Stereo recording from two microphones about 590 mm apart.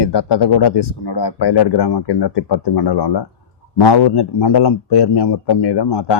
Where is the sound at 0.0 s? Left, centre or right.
Left.